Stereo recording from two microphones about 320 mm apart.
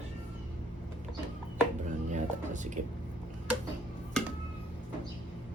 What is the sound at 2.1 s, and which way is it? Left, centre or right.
Music, right.